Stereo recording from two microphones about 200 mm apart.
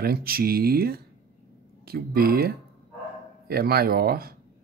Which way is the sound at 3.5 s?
50° right (ahead or behind).